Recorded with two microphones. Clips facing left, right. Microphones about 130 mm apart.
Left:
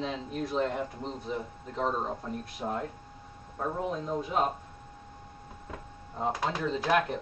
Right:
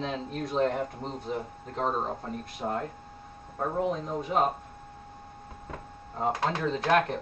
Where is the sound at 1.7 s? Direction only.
35° right (ahead or behind).